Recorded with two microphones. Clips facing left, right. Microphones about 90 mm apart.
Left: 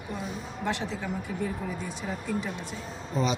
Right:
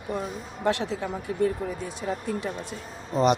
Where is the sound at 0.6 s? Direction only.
70° right (ahead or behind).